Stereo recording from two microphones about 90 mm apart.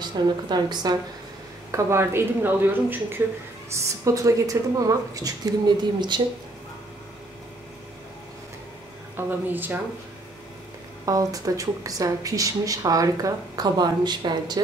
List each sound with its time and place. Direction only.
0.0 s a woman's voice: 55° right (ahead or behind)
1.7 s speech: 30° right (ahead or behind)
3.7 s a woman's voice: 35° right (ahead or behind); by 6.2 s 55° right (ahead or behind)
9.1 s speech: 20° right (ahead or behind)
11.1 s a woman's voice: 40° right (ahead or behind)